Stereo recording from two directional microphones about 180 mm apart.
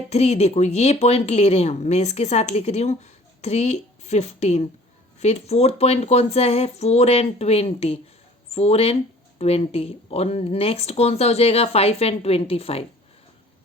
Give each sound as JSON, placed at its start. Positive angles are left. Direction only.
{"t": 0.1, "sound": "speech", "side_deg": 35}